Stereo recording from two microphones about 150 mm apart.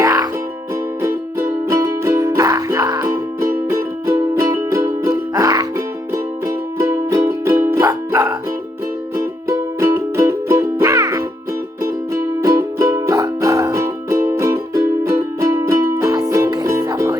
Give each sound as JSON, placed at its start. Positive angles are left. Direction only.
{"t": 0.0, "sound": "music", "side_deg": -25}
{"t": 1.6, "sound": "music", "side_deg": -20}